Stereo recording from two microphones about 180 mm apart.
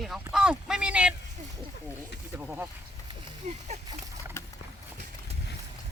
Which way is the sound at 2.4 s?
10° right (ahead or behind).